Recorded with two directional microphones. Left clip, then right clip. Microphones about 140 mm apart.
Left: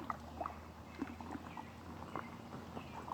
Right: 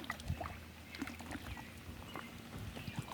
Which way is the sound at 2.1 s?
10° right (ahead or behind).